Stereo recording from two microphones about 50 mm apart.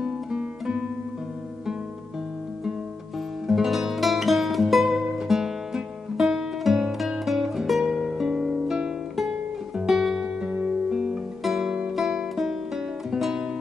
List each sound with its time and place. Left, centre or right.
0.0 s music: centre
3.4 s music: centre
10.4 s music: right
11.4 s music: centre